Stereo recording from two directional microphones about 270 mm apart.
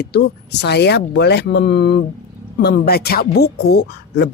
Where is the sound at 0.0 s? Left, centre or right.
Left.